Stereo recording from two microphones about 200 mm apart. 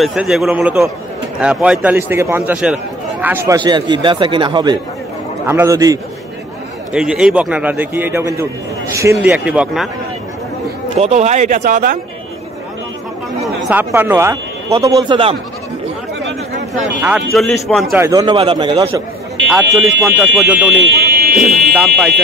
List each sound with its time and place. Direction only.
0.0 s a man's voice: centre (ahead or behind)
3.5 s a man's voice: 20° right (ahead or behind)
6.9 s a man's voice: 5° right (ahead or behind)
11.0 s speech: 35° right (ahead or behind)
13.7 s a man's voice: 10° right (ahead or behind); by 15.3 s 25° right (ahead or behind)
16.7 s a man's voice: 5° right (ahead or behind)
17.9 s a man's voice: 15° right (ahead or behind)
20.2 s a man's voice: 5° right (ahead or behind)
20.8 s buzzer: 55° right (ahead or behind)
21.4 s a man's voice: centre (ahead or behind)